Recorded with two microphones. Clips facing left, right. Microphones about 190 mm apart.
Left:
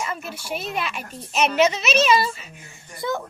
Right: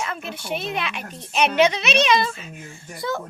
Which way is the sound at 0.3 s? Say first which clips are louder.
Right 2 dB; 5° left (ahead or behind).